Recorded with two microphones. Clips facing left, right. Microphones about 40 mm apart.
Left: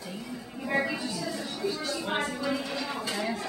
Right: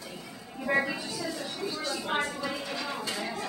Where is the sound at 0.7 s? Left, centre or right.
Centre.